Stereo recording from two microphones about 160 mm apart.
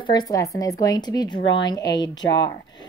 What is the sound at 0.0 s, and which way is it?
A woman's voice, 25° left (ahead or behind).